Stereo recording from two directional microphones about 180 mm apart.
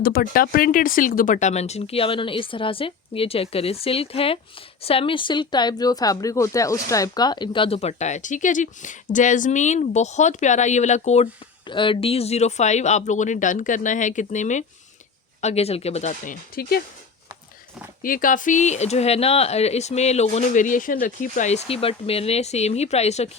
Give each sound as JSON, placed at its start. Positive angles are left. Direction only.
{"t": 0.0, "sound": "speech", "side_deg": 55}
{"t": 11.7, "sound": "speech", "side_deg": 30}
{"t": 18.0, "sound": "speech", "side_deg": 50}